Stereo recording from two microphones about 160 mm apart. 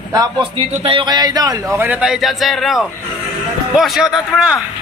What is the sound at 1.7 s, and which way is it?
A man's voice, 10° right (ahead or behind).